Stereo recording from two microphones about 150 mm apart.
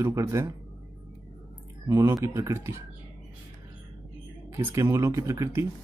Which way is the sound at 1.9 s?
20° right (ahead or behind).